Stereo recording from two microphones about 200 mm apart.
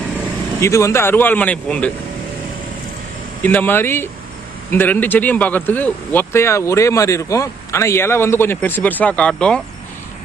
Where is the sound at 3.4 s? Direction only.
10° left (ahead or behind).